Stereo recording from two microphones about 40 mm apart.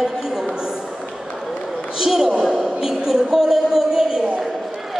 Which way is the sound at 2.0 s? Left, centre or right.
Centre.